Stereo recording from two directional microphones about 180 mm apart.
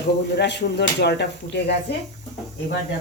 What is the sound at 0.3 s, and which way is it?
Speech, 70° left (ahead or behind).